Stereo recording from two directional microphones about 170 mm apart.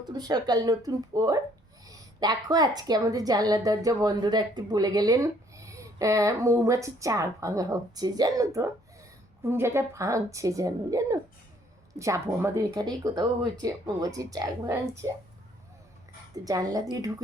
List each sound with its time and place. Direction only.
0.0 s a woman's voice: 20° right (ahead or behind)
16.4 s a woman's voice: 20° right (ahead or behind)